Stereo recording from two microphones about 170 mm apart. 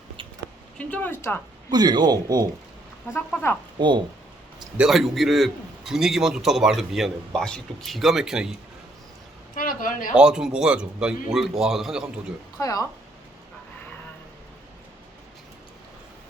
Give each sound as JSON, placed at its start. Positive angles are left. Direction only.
{"t": 0.8, "sound": "speech", "side_deg": 10}
{"t": 1.7, "sound": "speech", "side_deg": -25}
{"t": 3.1, "sound": "speech", "side_deg": 10}
{"t": 3.8, "sound": "speech", "side_deg": -25}
{"t": 4.8, "sound": "a man's voice", "side_deg": 0}
{"t": 9.6, "sound": "a man's voice", "side_deg": 55}
{"t": 10.2, "sound": "a man's voice", "side_deg": -5}
{"t": 12.5, "sound": "speech", "side_deg": 20}